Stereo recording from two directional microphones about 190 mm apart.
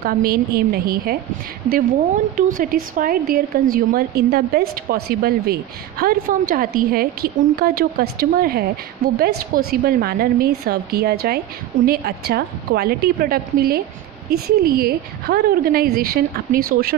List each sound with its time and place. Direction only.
0.0 s speech: 55° right (ahead or behind)
2.3 s speech: 45° right (ahead or behind)